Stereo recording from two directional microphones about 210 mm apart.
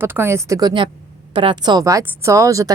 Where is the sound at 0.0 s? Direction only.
10° right (ahead or behind).